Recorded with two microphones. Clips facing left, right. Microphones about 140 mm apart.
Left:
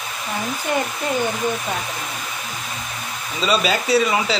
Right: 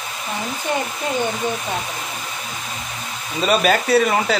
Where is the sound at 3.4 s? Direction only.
55° right (ahead or behind).